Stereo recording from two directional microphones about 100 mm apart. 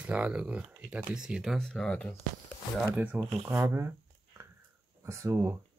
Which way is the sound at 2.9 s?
15° right (ahead or behind).